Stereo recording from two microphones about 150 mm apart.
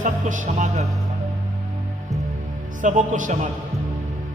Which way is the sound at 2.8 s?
55° right (ahead or behind).